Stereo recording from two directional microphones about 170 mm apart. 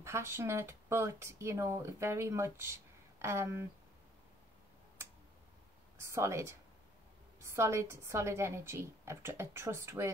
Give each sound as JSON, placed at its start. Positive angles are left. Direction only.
{"t": 0.0, "sound": "speech", "side_deg": -15}
{"t": 5.9, "sound": "a woman's voice", "side_deg": -15}